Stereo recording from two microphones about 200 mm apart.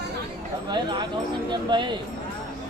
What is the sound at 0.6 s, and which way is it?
Speech, 20° right (ahead or behind).